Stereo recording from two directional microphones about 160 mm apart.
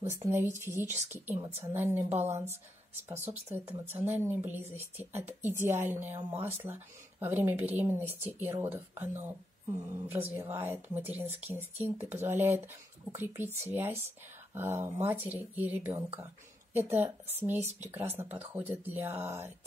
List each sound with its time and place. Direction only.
0.1 s speech: 15° right (ahead or behind)